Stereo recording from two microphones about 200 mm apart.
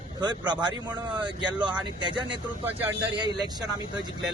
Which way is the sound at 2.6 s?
10° right (ahead or behind).